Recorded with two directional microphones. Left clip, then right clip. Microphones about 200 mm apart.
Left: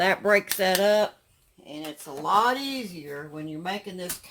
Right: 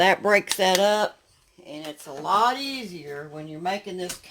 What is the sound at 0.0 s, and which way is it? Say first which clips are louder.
Speech: right 2 dB; 40° right (ahead or behind).